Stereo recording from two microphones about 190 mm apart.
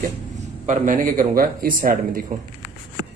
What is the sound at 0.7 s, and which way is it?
Speech, 45° right (ahead or behind).